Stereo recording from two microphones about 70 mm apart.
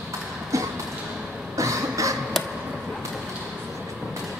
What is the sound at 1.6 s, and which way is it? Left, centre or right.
Cough, right.